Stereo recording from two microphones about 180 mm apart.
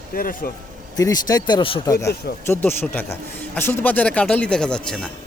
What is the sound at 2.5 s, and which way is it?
Speech, 10° left (ahead or behind).